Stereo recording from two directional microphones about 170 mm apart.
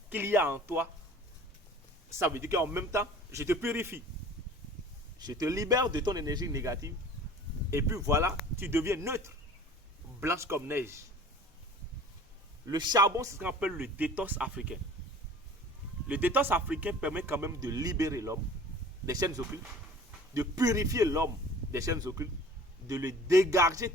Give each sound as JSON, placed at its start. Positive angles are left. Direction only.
{"t": 0.1, "sound": "a man's voice", "side_deg": -15}
{"t": 2.1, "sound": "a man's voice", "side_deg": -15}
{"t": 5.2, "sound": "a man's voice", "side_deg": -20}
{"t": 12.6, "sound": "a man's voice", "side_deg": -25}
{"t": 16.0, "sound": "a man's voice", "side_deg": -10}
{"t": 20.3, "sound": "speech", "side_deg": -20}